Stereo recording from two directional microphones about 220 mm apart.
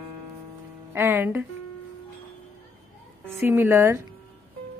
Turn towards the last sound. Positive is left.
turn(degrees=-10)  # may be behind; listen again after turning